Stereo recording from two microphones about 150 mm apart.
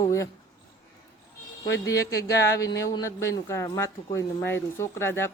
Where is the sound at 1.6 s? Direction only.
20° left (ahead or behind).